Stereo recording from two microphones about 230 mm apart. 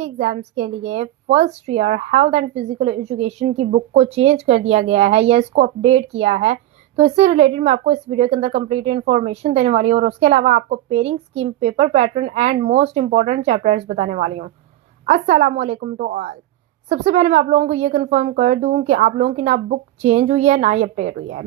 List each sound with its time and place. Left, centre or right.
0.0 s a woman's voice: right